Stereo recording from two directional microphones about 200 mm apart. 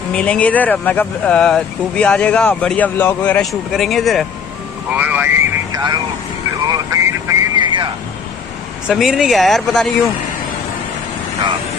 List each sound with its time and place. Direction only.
0.1 s speech: 5° left (ahead or behind); by 5.4 s 10° right (ahead or behind)
6.7 s vehicle: 15° right (ahead or behind)
8.8 s speech: centre (ahead or behind)